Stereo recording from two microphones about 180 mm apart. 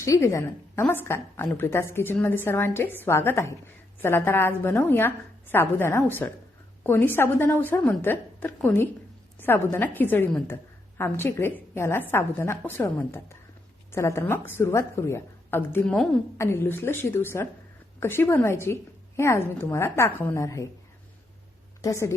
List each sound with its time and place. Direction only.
0.0 s a woman's voice: 15° left (ahead or behind)
21.8 s a woman's voice: 15° left (ahead or behind)